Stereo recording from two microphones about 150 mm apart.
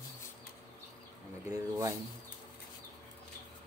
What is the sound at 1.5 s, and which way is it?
Speech, 25° right (ahead or behind).